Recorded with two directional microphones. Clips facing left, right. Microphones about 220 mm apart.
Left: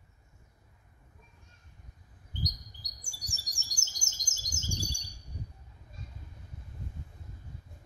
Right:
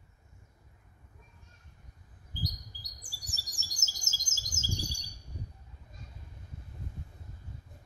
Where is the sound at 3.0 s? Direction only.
5° right (ahead or behind).